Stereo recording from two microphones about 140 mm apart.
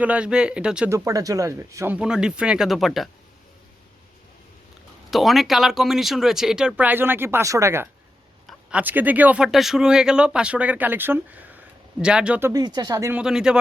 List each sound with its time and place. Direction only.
0.0 s speech: 10° right (ahead or behind)
0.9 s speech: 25° right (ahead or behind)
2.0 s speech: 5° right (ahead or behind)
5.1 s speech: centre (ahead or behind)
12.5 s speech: 30° right (ahead or behind)
13.1 s speech: 5° right (ahead or behind)